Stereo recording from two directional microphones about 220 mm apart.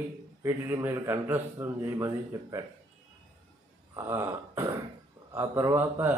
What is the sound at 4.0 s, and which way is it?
A man's voice, 10° right (ahead or behind).